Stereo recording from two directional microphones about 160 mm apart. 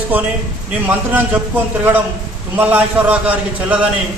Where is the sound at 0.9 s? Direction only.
10° right (ahead or behind).